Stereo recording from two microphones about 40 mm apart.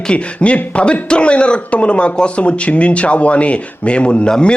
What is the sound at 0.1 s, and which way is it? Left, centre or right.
A man's voice, left.